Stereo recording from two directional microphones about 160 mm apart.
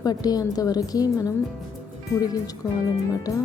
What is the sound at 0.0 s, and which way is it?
Speech, 25° left (ahead or behind).